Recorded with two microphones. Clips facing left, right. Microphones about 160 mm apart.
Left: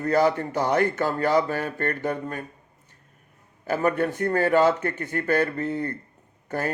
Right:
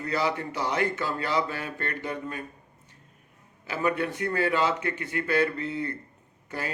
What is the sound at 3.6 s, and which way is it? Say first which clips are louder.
Mantra: left 4 dB; 45° left (ahead or behind).